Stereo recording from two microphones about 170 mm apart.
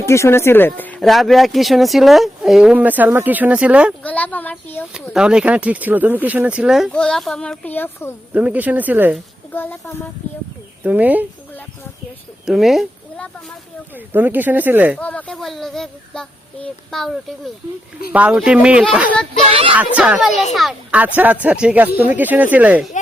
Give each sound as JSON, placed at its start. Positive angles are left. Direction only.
{"t": 0.0, "sound": "speech", "side_deg": 15}
{"t": 4.0, "sound": "a sound", "side_deg": 10}
{"t": 5.1, "sound": "speech", "side_deg": -5}
{"t": 8.3, "sound": "speech", "side_deg": -10}
{"t": 9.5, "sound": "speech", "side_deg": 10}
{"t": 10.8, "sound": "speech", "side_deg": -10}
{"t": 12.5, "sound": "a sound", "side_deg": 0}
{"t": 13.9, "sound": "speech", "side_deg": -10}
{"t": 14.9, "sound": "speech", "side_deg": 5}
{"t": 19.5, "sound": "speech", "side_deg": -30}
{"t": 20.0, "sound": "speech", "side_deg": -5}